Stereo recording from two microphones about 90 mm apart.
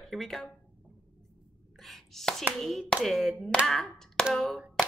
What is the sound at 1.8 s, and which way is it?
Speech, 5° left (ahead or behind).